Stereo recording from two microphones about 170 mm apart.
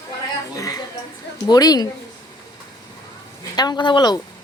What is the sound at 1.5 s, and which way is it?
Speech, 20° left (ahead or behind).